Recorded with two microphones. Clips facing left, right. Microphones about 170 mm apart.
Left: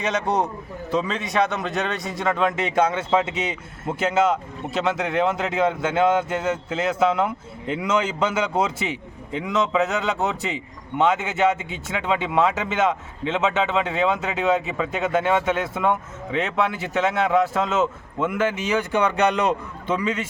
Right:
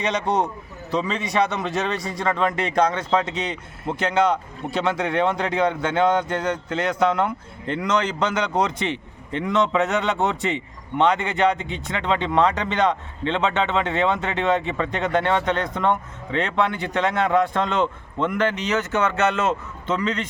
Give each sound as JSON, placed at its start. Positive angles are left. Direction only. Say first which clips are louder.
{"t": 0.0, "sound": "a man's voice", "louder": "even", "side_deg": 0}